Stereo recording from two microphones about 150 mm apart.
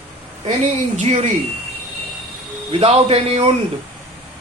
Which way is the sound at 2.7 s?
40° right (ahead or behind).